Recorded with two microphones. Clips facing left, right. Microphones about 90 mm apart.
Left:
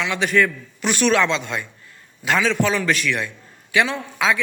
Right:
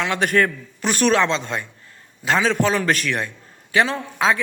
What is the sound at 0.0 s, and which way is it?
A man's voice, 50° right (ahead or behind).